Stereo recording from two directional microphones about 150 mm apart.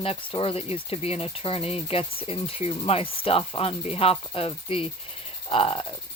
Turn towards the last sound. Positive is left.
turn(degrees=35)  # may be behind; listen again after turning